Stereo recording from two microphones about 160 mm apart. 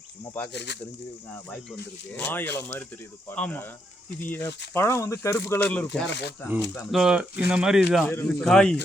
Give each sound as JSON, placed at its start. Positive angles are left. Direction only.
{"t": 0.5, "sound": "speech", "side_deg": 90}
{"t": 2.1, "sound": "speech", "side_deg": 10}
{"t": 6.1, "sound": "speech", "side_deg": 90}
{"t": 6.7, "sound": "speech", "side_deg": -5}
{"t": 8.0, "sound": "speech", "side_deg": 15}